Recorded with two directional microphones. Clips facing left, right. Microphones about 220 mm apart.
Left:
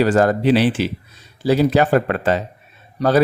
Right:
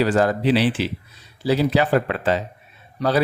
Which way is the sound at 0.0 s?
45° left (ahead or behind).